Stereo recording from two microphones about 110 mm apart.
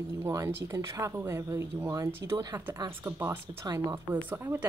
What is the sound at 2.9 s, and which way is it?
A woman's voice, 20° right (ahead or behind).